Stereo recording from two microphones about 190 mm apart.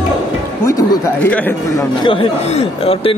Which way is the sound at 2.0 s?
30° left (ahead or behind).